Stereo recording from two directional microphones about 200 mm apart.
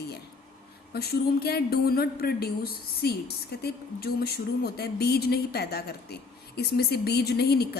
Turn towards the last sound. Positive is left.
turn(degrees=55)  # may be behind; listen again after turning